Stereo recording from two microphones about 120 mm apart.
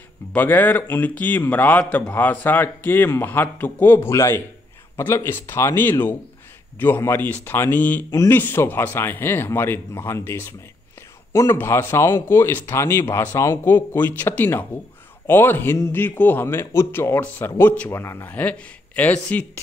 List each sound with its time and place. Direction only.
0.3 s a man's voice: 15° left (ahead or behind)